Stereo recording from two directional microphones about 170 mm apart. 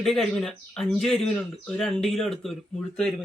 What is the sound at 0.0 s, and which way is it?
Speech, centre (ahead or behind).